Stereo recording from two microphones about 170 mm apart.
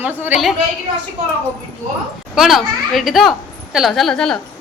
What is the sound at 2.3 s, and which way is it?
A child's voice, centre (ahead or behind).